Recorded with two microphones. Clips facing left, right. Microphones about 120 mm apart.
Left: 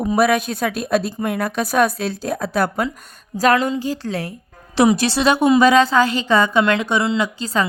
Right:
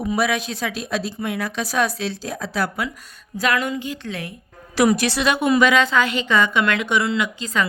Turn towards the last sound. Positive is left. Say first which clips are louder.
# left 3 dB
turn(degrees=35)  # may be behind; listen again after turning